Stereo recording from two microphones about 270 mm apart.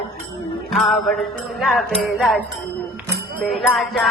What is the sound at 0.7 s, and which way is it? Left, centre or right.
Music, centre.